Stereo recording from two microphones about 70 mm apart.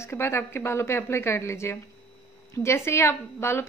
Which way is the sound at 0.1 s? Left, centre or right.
Left.